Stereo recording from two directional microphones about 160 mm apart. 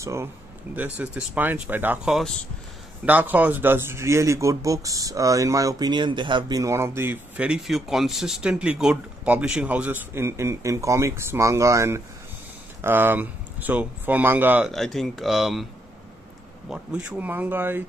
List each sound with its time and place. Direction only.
0.0 s speech: 20° right (ahead or behind)
14.7 s speech: centre (ahead or behind)
16.6 s speech: 5° right (ahead or behind)